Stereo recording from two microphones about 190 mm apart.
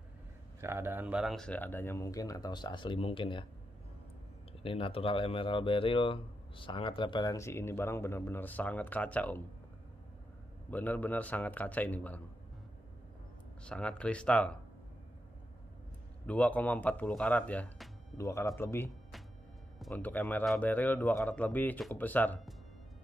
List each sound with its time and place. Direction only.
0.6 s speech: 15° right (ahead or behind); by 3.4 s 25° left (ahead or behind)
4.5 s speech: 30° left (ahead or behind); by 9.4 s 10° left (ahead or behind)
10.7 s speech: 10° left (ahead or behind)
13.7 s speech: 5° left (ahead or behind)
16.3 s speech: 10° left (ahead or behind)